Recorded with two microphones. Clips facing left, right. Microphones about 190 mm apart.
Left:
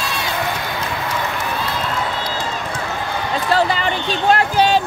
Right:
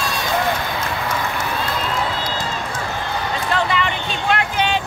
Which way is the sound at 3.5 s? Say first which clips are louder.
Left 4 dB; 35° left (ahead or behind).